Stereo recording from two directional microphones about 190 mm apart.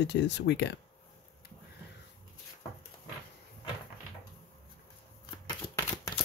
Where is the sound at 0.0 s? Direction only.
65° left (ahead or behind).